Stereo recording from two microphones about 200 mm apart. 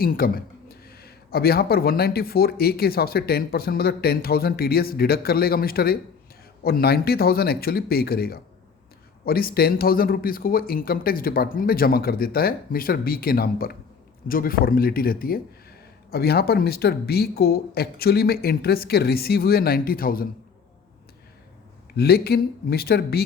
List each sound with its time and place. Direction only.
0.0 s speech: 45° left (ahead or behind)
21.9 s speech: 50° left (ahead or behind)